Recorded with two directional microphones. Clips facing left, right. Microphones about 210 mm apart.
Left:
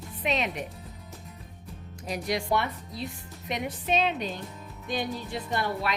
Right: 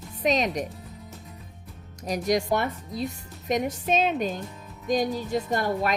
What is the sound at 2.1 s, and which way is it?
A woman's voice, 45° right (ahead or behind).